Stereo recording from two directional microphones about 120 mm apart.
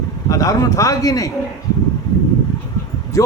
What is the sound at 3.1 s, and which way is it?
Speech, 25° left (ahead or behind).